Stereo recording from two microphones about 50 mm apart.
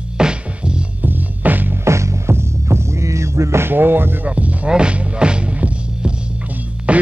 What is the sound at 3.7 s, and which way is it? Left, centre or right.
Speech, right.